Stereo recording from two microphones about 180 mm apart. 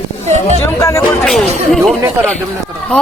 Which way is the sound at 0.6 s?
15° left (ahead or behind).